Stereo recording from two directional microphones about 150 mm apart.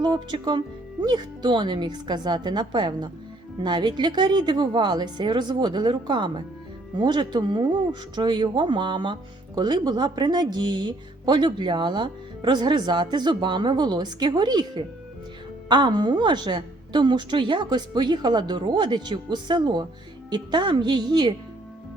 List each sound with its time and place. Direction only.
0.0 s a woman's voice: 30° right (ahead or behind)